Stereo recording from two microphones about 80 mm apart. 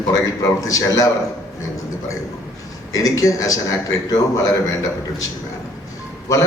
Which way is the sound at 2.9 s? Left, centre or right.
Left.